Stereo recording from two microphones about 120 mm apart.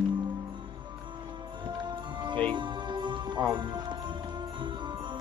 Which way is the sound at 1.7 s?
40° right (ahead or behind).